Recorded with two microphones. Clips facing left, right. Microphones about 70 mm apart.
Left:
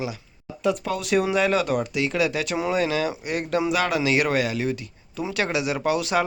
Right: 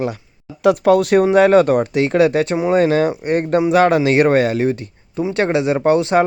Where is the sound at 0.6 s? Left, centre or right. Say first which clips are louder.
Right 12 dB; right.